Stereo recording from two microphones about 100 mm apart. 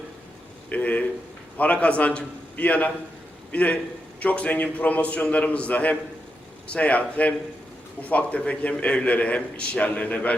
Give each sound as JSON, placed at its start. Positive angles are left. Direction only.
{"t": 0.7, "sound": "a man's voice", "side_deg": 15}